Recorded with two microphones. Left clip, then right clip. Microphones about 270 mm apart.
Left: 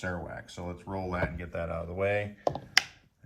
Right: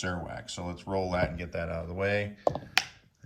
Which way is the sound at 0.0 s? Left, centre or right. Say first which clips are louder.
Right 1 dB; centre.